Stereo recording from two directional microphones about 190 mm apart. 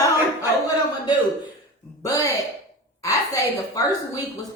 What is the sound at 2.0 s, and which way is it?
Speech, 15° left (ahead or behind).